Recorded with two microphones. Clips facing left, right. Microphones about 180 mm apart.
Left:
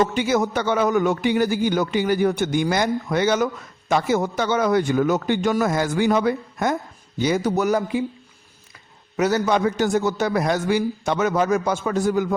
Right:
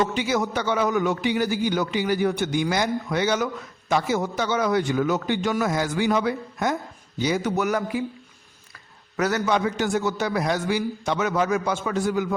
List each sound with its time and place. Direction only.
0.0 s a man's voice: 50° left (ahead or behind)
7.4 s speech: 35° left (ahead or behind)
9.1 s a man's voice: 25° left (ahead or behind)
9.5 s a man's voice: 45° left (ahead or behind)